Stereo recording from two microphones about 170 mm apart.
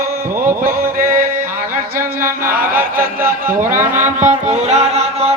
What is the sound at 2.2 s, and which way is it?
Chant, 10° right (ahead or behind).